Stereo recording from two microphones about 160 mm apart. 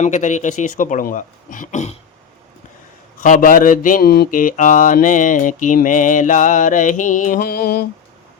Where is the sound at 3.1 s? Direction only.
50° left (ahead or behind); by 7.8 s 70° left (ahead or behind).